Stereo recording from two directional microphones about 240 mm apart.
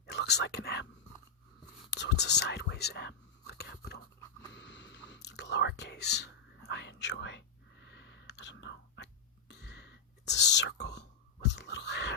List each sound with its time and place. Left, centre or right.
0.0 s whispering: left
1.9 s whispering: left